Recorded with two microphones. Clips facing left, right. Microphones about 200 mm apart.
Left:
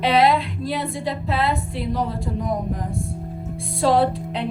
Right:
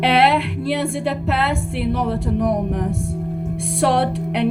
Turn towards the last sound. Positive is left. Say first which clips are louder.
# right 2 dB
turn(degrees=-70)  # may be behind; listen again after turning